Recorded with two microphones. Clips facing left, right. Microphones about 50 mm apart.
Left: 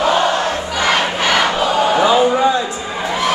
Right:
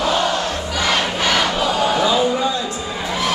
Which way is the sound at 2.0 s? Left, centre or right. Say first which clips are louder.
Left 5 dB; left.